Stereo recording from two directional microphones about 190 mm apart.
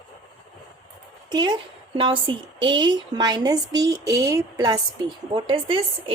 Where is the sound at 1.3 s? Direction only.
20° right (ahead or behind).